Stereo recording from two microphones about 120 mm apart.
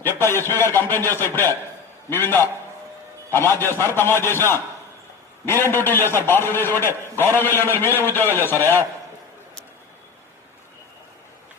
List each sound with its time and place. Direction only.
0.0 s a man's voice: 20° left (ahead or behind)